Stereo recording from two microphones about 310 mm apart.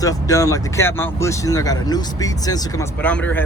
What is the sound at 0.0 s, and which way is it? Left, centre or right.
Speech, centre.